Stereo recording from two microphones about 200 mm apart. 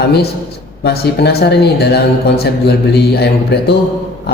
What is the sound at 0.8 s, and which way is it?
Speech, 55° left (ahead or behind).